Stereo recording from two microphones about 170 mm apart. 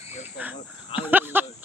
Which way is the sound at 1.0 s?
10° right (ahead or behind).